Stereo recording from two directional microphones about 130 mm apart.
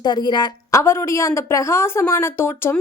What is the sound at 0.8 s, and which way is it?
A woman's voice, 20° left (ahead or behind).